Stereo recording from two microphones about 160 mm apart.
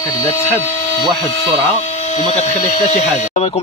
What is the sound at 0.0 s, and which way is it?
Tools, 25° left (ahead or behind).